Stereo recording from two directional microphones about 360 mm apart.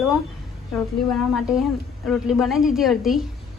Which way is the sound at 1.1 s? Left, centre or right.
Centre.